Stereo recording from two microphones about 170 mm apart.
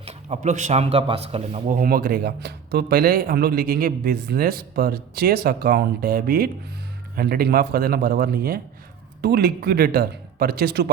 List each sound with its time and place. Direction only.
0.0 s speech: 40° right (ahead or behind)
1.7 s speech: 60° right (ahead or behind)